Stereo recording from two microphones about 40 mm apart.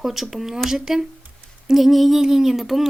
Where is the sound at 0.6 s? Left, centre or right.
Centre.